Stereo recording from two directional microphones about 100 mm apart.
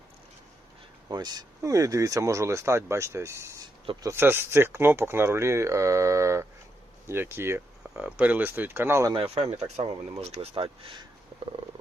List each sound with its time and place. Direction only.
1.0 s speech: 45° right (ahead or behind); by 9.0 s 25° right (ahead or behind)
9.2 s speech: 80° right; by 11.0 s 60° right (ahead or behind)